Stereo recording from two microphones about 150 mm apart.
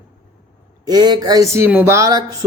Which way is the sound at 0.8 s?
25° right (ahead or behind).